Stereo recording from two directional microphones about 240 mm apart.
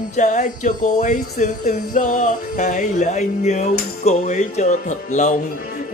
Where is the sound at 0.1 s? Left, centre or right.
Left.